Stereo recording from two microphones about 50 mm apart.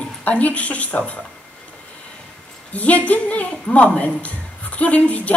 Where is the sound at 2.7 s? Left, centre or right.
Left.